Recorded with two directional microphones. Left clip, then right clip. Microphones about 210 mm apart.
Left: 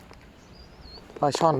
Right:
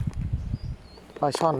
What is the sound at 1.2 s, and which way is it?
Speech, 5° left (ahead or behind).